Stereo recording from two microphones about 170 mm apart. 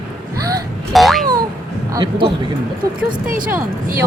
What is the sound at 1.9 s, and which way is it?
Speech, 30° right (ahead or behind).